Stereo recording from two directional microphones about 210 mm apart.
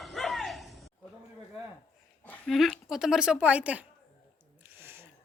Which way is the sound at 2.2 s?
5° left (ahead or behind).